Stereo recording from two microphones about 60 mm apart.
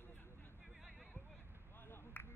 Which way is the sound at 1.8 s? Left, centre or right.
Left.